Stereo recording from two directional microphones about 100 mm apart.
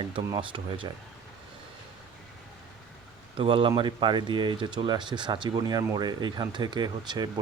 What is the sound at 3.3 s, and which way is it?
Speech, 60° right (ahead or behind).